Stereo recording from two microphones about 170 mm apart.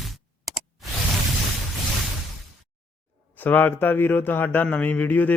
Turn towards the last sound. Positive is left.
turn(degrees=10)  # may be behind; listen again after turning